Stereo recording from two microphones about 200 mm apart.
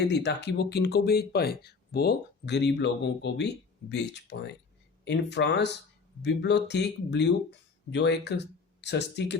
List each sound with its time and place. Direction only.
0.1 s speech: 55° left (ahead or behind)